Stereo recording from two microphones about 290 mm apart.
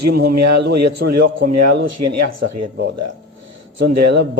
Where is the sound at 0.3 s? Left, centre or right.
Right.